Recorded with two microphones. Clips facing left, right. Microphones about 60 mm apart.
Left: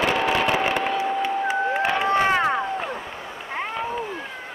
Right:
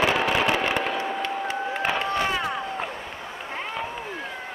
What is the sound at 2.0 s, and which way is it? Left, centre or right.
Run, left.